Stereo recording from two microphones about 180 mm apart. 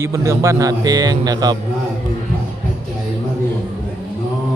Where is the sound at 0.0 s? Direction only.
15° right (ahead or behind).